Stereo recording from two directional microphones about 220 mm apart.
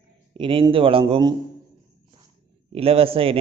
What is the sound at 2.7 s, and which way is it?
Speech, 25° right (ahead or behind).